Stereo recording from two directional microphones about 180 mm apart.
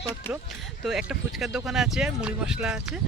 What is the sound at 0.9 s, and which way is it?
Speech, centre (ahead or behind).